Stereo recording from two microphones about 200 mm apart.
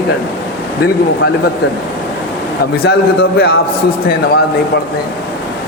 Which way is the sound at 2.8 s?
55° left (ahead or behind).